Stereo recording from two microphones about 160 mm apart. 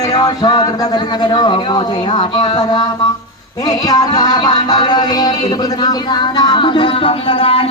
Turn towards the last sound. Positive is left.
turn(degrees=35)  # may be behind; listen again after turning